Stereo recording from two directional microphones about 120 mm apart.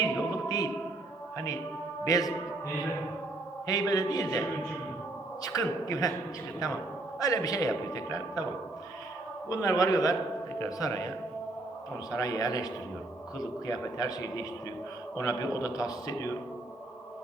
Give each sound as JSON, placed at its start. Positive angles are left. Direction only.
{"t": 0.0, "sound": "music", "side_deg": 30}
{"t": 2.0, "sound": "a man's voice", "side_deg": 30}
{"t": 3.7, "sound": "a man's voice", "side_deg": 30}
{"t": 5.4, "sound": "a man's voice", "side_deg": 30}
{"t": 7.2, "sound": "a man's voice", "side_deg": 30}
{"t": 9.5, "sound": "a man's voice", "side_deg": 30}
{"t": 12.1, "sound": "a man's voice", "side_deg": 30}